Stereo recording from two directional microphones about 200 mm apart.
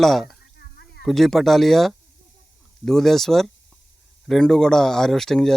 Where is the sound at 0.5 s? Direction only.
55° left (ahead or behind).